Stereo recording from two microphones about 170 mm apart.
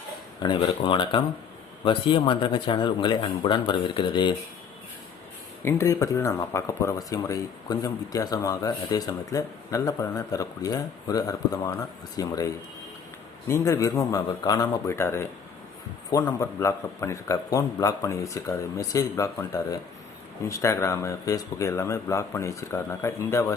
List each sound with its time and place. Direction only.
0.4 s speech: 30° left (ahead or behind)
5.6 s speech: 15° left (ahead or behind)
13.5 s a man's voice: 20° left (ahead or behind)